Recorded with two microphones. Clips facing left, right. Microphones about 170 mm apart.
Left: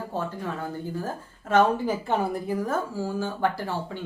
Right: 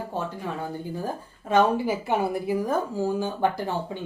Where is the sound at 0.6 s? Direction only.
15° right (ahead or behind).